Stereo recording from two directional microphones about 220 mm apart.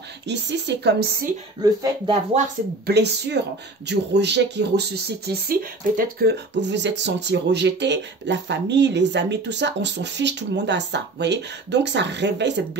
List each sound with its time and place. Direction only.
0.3 s speech: 50° right (ahead or behind)
1.6 s speech: 15° right (ahead or behind)
2.9 s speech: 50° right (ahead or behind)